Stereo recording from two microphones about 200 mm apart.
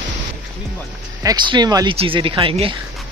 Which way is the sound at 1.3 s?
20° right (ahead or behind).